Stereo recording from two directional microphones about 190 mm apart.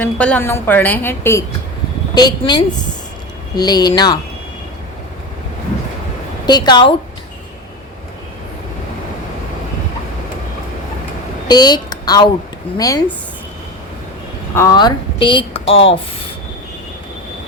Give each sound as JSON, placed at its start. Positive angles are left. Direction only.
{"t": 0.0, "sound": "a woman's voice", "side_deg": 10}
{"t": 6.4, "sound": "a woman's voice", "side_deg": 20}
{"t": 11.4, "sound": "a woman's voice", "side_deg": 20}
{"t": 14.5, "sound": "a woman's voice", "side_deg": 20}